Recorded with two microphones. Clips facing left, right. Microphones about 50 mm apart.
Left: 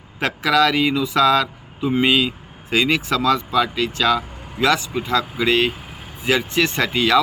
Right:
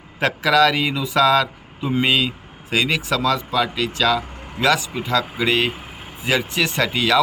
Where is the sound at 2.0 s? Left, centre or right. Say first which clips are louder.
Left 1 dB; centre.